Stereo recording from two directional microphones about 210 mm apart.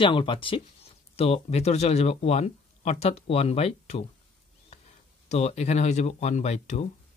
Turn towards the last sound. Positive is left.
turn(degrees=30)  # may be behind; listen again after turning